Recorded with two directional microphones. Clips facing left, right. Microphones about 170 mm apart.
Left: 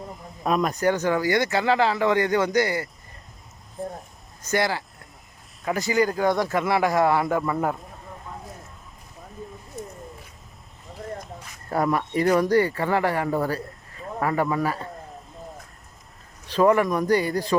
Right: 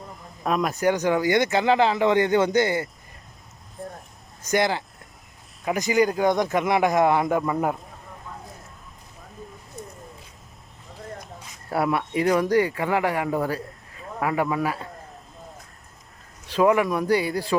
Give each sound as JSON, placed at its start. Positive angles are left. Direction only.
{"t": 0.4, "sound": "speech", "side_deg": 0}
{"t": 4.4, "sound": "speech", "side_deg": -20}
{"t": 11.7, "sound": "speech", "side_deg": -10}
{"t": 16.5, "sound": "speech", "side_deg": -10}